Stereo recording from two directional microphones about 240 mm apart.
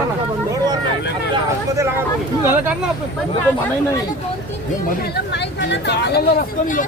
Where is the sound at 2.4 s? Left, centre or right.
Centre.